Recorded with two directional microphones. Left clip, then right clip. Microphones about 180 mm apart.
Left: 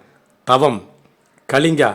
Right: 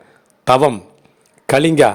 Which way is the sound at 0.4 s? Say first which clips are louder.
Right 2 dB; 30° right (ahead or behind).